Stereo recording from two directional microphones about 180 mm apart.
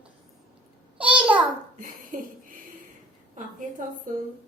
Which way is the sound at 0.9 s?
5° right (ahead or behind).